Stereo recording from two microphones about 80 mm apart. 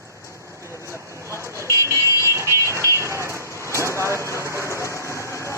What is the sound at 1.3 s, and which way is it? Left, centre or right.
Vehicle, right.